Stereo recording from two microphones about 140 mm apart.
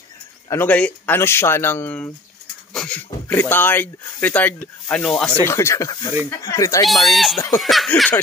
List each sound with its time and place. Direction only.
0.5 s speech: 15° left (ahead or behind)
5.4 s speech: 20° left (ahead or behind)
6.9 s a sound: centre (ahead or behind)